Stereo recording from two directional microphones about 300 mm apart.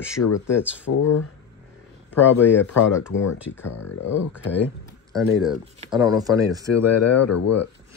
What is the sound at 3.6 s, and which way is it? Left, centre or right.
Speech, left.